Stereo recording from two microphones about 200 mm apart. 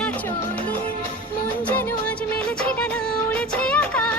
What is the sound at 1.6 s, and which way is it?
Music, 5° left (ahead or behind).